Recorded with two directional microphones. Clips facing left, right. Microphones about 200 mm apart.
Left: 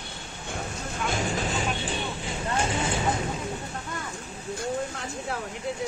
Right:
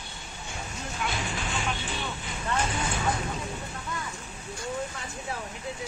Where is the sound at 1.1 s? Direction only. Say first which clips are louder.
Left 8 dB; 45° left (ahead or behind); by 3.1 s 25° left (ahead or behind).